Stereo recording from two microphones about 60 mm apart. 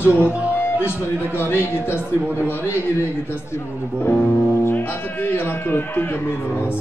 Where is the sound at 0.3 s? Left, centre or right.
Right.